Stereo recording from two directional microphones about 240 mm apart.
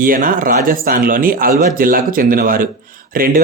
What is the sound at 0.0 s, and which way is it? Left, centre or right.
Speech, right.